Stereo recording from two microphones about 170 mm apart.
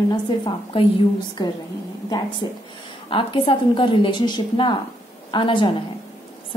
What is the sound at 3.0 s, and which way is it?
A woman's voice, 30° left (ahead or behind).